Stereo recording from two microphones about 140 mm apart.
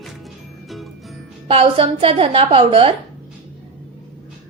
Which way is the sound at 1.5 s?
40° right (ahead or behind).